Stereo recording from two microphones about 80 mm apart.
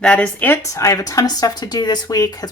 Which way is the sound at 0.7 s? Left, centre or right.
Left.